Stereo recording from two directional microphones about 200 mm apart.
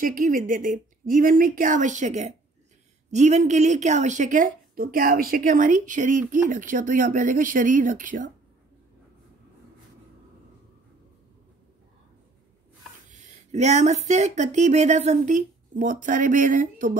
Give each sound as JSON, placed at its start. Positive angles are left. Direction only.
{"t": 0.0, "sound": "speech", "side_deg": -40}
{"t": 13.1, "sound": "speech", "side_deg": -35}